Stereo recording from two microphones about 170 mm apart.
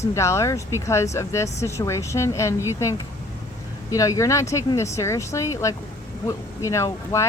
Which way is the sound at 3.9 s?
20° left (ahead or behind).